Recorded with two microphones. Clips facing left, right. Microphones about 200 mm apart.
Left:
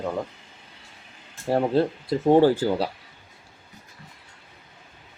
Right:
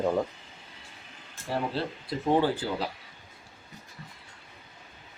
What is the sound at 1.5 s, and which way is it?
Speech, 45° left (ahead or behind).